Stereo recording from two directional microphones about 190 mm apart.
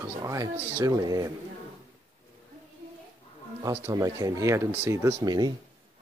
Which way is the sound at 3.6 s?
15° right (ahead or behind).